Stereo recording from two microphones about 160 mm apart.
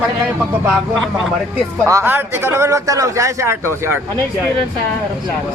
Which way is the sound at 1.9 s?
15° right (ahead or behind).